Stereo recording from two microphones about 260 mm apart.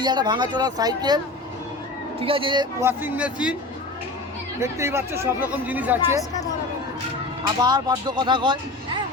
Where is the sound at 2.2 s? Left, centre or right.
Centre.